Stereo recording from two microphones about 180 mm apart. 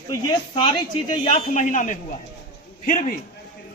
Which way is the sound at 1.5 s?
45° left (ahead or behind).